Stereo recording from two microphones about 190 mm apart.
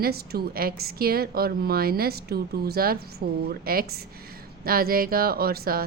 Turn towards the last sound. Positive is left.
turn(degrees=-50)  # may be behind; listen again after turning